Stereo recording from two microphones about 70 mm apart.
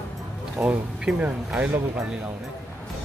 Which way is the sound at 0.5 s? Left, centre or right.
Centre.